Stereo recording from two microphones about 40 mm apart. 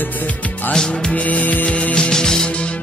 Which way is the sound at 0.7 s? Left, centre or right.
Centre.